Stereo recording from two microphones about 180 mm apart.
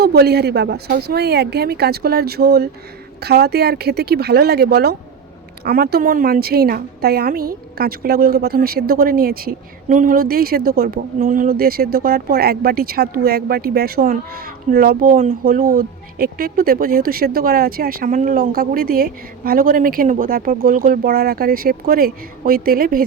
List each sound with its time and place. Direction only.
0.0 s a woman's voice: 60° right (ahead or behind)